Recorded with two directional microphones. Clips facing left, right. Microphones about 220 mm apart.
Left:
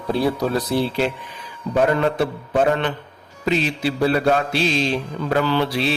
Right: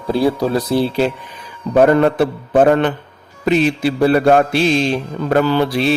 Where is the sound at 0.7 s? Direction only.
35° right (ahead or behind).